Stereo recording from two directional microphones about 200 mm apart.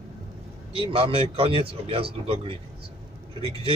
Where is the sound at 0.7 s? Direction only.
25° right (ahead or behind).